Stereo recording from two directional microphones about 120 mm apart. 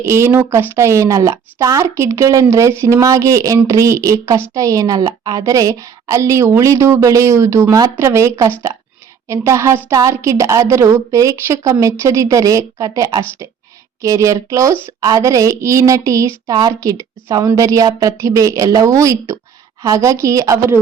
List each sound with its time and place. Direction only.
0.0 s a woman's voice: 25° right (ahead or behind)